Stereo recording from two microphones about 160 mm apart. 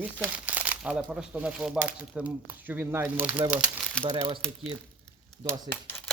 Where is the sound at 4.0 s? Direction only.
35° right (ahead or behind).